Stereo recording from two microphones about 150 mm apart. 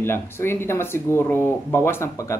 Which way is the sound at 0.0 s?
15° left (ahead or behind).